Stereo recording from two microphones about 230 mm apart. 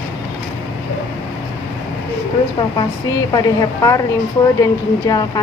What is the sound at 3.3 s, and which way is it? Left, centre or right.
Speech, centre.